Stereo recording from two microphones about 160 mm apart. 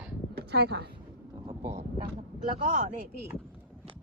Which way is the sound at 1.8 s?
40° right (ahead or behind).